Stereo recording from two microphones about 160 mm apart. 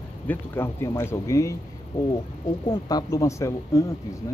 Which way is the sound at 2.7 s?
25° left (ahead or behind).